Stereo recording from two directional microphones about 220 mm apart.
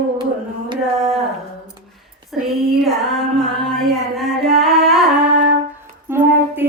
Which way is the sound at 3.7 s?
Centre (ahead or behind).